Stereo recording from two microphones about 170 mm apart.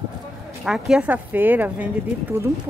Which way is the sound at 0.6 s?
5° right (ahead or behind).